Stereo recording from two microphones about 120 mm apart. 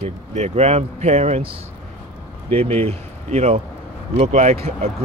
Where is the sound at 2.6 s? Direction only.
55° right (ahead or behind).